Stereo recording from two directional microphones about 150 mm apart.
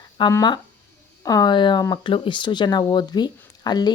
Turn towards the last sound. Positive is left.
turn(degrees=30)  # may be behind; listen again after turning